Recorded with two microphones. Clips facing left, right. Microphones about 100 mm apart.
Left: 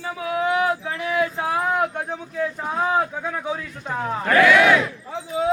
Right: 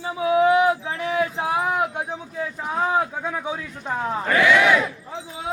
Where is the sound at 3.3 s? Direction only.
10° right (ahead or behind).